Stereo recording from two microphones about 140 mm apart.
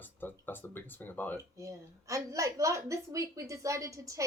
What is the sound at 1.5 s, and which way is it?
A woman's voice, 20° right (ahead or behind).